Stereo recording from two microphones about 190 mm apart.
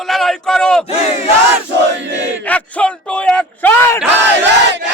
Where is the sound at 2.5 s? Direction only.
5° left (ahead or behind).